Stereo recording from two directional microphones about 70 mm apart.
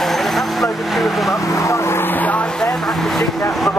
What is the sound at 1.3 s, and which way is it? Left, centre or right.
Vehicle, left.